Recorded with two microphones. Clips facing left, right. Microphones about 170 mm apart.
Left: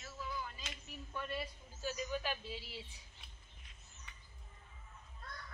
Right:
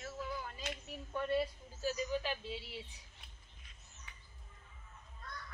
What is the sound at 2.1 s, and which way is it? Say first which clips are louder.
Speech: right 2 dB; 25° right (ahead or behind).